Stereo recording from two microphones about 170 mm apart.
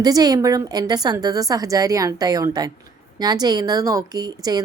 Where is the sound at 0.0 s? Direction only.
20° right (ahead or behind).